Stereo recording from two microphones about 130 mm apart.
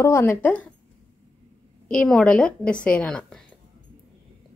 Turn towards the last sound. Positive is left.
turn(degrees=5)  # may be behind; listen again after turning